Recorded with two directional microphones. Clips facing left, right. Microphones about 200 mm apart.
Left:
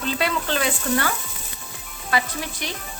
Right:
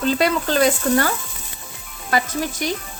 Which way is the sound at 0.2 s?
40° right (ahead or behind).